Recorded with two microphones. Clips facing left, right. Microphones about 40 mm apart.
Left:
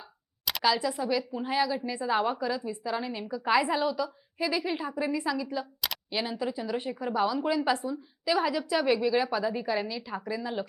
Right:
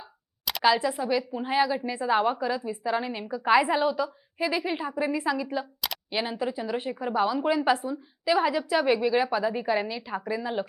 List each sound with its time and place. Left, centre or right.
0.6 s a woman's voice: centre